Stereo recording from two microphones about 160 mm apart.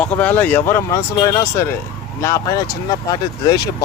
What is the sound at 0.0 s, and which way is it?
Speech, 10° left (ahead or behind).